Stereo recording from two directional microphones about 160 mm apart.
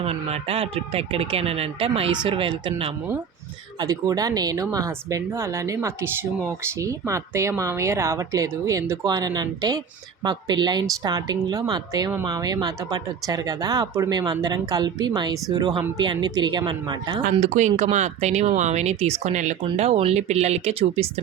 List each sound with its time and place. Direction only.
0.0 s speech: 40° right (ahead or behind)
3.8 s speech: 20° right (ahead or behind)
17.4 s speech: 45° right (ahead or behind)